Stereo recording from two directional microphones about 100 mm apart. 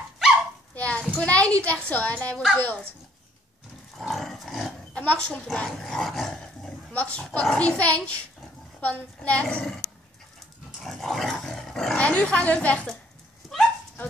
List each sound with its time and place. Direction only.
0.7 s a child's voice: 15° left (ahead or behind)
4.0 s roar: centre (ahead or behind)
5.0 s a child's voice: 10° left (ahead or behind)
10.8 s speech: centre (ahead or behind)
13.4 s dog: centre (ahead or behind)